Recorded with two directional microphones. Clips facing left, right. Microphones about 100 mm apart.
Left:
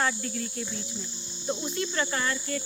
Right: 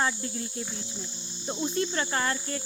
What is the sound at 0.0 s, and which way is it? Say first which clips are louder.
Speech: even; 25° right (ahead or behind).